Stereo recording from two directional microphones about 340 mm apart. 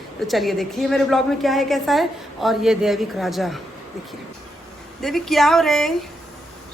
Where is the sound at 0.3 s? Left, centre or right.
Centre.